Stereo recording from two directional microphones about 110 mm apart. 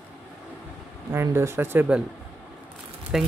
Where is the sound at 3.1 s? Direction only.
5° right (ahead or behind).